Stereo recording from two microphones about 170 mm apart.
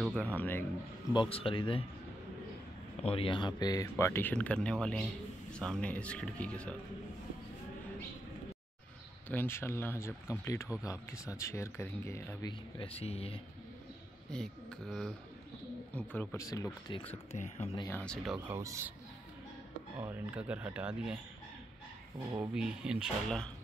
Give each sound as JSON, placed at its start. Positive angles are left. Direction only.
{"t": 0.0, "sound": "speech", "side_deg": 0}
{"t": 0.4, "sound": "speech", "side_deg": 10}
{"t": 1.1, "sound": "speech", "side_deg": 30}
{"t": 3.1, "sound": "speech", "side_deg": 30}
{"t": 4.0, "sound": "speech", "side_deg": 10}
{"t": 9.3, "sound": "speech", "side_deg": 15}
{"t": 14.3, "sound": "speech", "side_deg": 5}
{"t": 17.3, "sound": "speech", "side_deg": 40}
{"t": 17.8, "sound": "speech", "side_deg": 10}
{"t": 18.5, "sound": "speech", "side_deg": -15}
{"t": 20.0, "sound": "speech", "side_deg": -10}
{"t": 22.4, "sound": "speech", "side_deg": -5}